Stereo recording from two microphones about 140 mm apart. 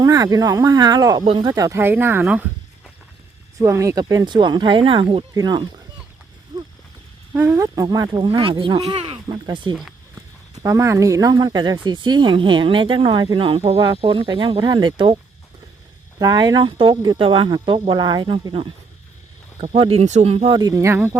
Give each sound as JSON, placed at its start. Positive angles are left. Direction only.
{"t": 0.0, "sound": "speech", "side_deg": -25}
{"t": 3.6, "sound": "speech", "side_deg": -20}
{"t": 5.3, "sound": "speech", "side_deg": -30}
{"t": 6.5, "sound": "a sound", "side_deg": -25}
{"t": 7.3, "sound": "speech", "side_deg": -20}
{"t": 10.5, "sound": "speech", "side_deg": -25}
{"t": 19.7, "sound": "speech", "side_deg": -40}
{"t": 20.5, "sound": "speech", "side_deg": -30}